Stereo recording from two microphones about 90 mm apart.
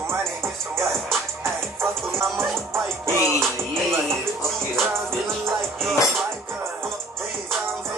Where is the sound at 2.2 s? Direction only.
Centre (ahead or behind).